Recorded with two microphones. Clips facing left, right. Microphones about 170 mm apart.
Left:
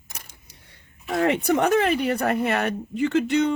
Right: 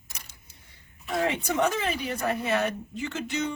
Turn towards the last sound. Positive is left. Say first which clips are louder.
# left 10 dB
turn(degrees=60)  # may be behind; listen again after turning